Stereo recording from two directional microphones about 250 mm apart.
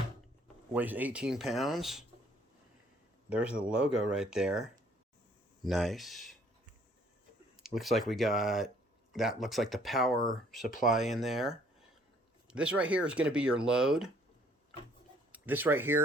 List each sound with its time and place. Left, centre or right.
0.7 s speech: centre
3.2 s speech: centre
7.6 s speech: centre
15.3 s speech: centre